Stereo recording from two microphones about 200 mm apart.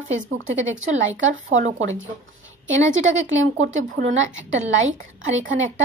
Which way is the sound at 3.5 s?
70° right (ahead or behind).